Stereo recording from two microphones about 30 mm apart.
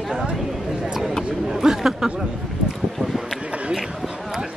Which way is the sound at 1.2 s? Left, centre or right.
Centre.